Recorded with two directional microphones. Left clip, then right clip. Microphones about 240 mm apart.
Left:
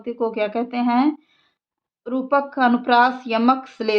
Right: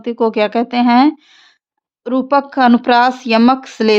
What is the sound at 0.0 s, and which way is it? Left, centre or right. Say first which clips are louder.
Speech: right 8 dB; right.